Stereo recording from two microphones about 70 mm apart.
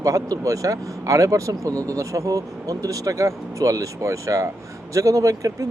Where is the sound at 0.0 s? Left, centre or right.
Right.